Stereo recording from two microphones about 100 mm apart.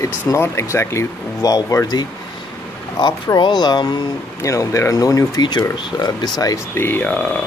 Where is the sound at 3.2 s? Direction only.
45° left (ahead or behind).